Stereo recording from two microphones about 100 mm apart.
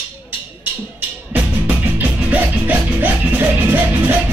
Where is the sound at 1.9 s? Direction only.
20° right (ahead or behind).